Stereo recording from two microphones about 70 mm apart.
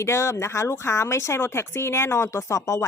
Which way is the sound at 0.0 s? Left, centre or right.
Left.